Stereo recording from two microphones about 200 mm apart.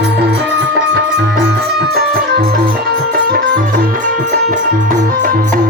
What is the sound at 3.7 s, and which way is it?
Music, 40° right (ahead or behind).